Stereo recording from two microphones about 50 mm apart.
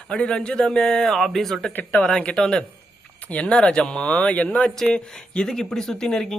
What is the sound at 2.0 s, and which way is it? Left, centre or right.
Speech, centre.